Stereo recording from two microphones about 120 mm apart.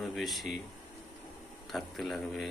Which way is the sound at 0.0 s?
Centre (ahead or behind).